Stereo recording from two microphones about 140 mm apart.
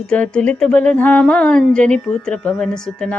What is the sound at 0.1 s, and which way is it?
Speech, 10° left (ahead or behind).